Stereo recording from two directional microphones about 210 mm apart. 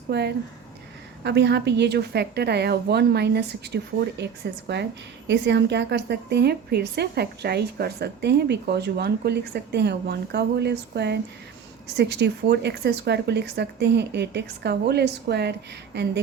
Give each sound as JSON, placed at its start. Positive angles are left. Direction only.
{"t": 0.1, "sound": "a woman's voice", "side_deg": -50}
{"t": 5.3, "sound": "a woman's voice", "side_deg": -55}